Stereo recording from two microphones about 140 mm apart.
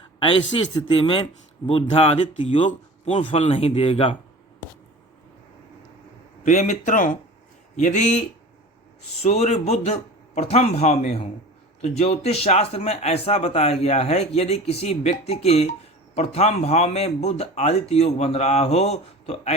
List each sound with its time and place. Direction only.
0.2 s a man's voice: 40° left (ahead or behind)
2.6 s a man's voice: 50° left (ahead or behind)
6.4 s speech: 60° left (ahead or behind)
7.8 s speech: 60° left (ahead or behind)
9.2 s a man's voice: 50° left (ahead or behind)